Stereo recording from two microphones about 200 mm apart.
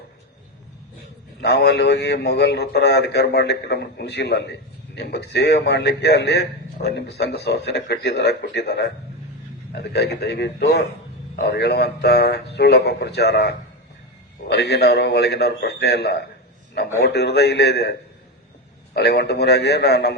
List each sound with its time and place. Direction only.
1.4 s a man's voice: 55° left (ahead or behind)
9.9 s a man's voice: 55° left (ahead or behind)
18.9 s a man's voice: 55° left (ahead or behind)